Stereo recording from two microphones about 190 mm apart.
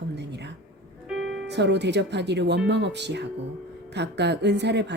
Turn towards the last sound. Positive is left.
turn(degrees=-65)  # may be behind; listen again after turning